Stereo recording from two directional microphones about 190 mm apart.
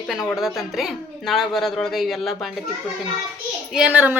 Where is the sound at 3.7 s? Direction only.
5° right (ahead or behind).